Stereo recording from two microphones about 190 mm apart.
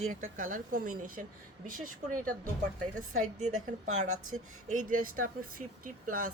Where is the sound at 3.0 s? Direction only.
40° right (ahead or behind).